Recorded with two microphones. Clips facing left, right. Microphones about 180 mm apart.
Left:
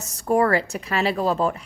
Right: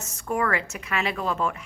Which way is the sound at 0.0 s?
35° left (ahead or behind).